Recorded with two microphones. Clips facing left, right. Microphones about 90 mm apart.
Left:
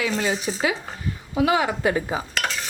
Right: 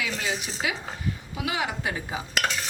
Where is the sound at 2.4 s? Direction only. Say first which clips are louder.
Left 1 dB; centre (ahead or behind).